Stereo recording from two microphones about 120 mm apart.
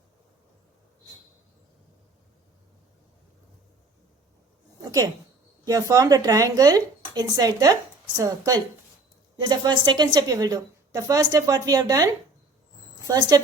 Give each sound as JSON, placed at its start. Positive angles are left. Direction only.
{"t": 5.6, "sound": "speech", "side_deg": -30}